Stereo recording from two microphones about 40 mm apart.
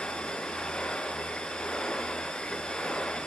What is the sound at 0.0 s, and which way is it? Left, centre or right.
Vehicle, left.